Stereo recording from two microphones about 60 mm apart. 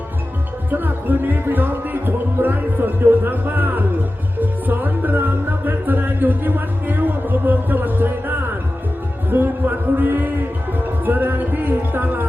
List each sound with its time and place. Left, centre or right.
0.7 s music: right
9.3 s music: right